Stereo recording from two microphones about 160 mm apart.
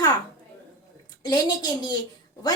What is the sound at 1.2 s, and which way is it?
Speech, 25° left (ahead or behind).